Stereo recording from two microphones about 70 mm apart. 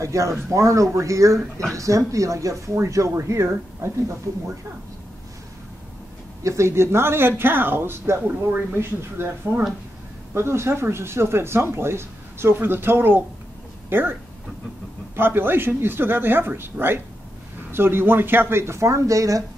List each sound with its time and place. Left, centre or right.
0.0 s speech: right
6.4 s speech: right
15.1 s speech: right